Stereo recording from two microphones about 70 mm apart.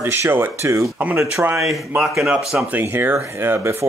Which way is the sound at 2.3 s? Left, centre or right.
Centre.